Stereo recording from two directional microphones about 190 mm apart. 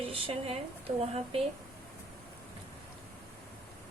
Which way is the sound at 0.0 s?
30° right (ahead or behind).